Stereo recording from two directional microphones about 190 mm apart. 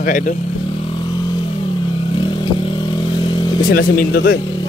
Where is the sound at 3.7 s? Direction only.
55° left (ahead or behind).